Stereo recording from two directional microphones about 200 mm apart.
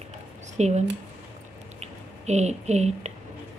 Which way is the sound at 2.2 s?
35° right (ahead or behind).